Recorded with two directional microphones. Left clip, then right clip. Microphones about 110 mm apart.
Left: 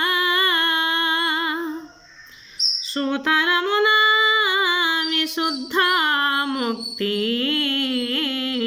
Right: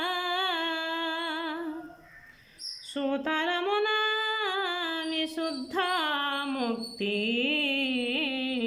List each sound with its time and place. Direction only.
0.0 s music: 30° right (ahead or behind)
2.9 s female singing: 30° right (ahead or behind)